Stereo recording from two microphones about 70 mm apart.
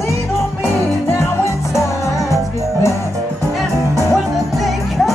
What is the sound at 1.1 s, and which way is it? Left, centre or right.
Music, left.